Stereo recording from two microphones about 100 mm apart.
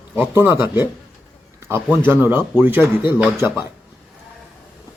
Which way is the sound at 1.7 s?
20° right (ahead or behind).